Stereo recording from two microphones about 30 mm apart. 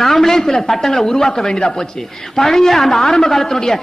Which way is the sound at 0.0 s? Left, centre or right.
Centre.